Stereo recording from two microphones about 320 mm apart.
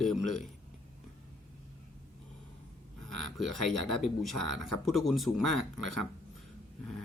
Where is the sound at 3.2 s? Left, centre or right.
Centre.